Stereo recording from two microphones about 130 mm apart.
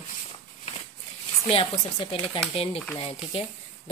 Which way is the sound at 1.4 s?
45° left (ahead or behind).